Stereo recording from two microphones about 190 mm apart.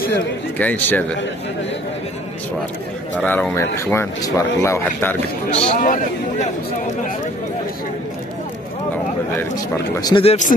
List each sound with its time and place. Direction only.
0.6 s speech: 10° left (ahead or behind)
3.2 s speech: 10° left (ahead or behind)
5.5 s speech: 40° left (ahead or behind)
9.9 s speech: 20° left (ahead or behind)
10.2 s speech: 35° left (ahead or behind)